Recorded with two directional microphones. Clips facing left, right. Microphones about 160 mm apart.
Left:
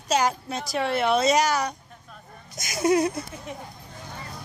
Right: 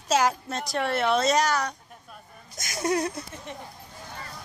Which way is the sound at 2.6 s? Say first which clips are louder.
Left 5 dB; 5° left (ahead or behind).